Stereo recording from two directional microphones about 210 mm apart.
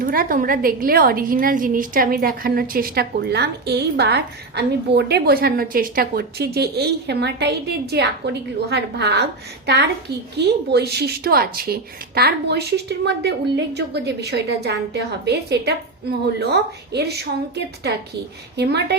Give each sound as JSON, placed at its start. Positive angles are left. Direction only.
{"t": 0.0, "sound": "a woman's voice", "side_deg": -45}
{"t": 10.3, "sound": "a woman's voice", "side_deg": -50}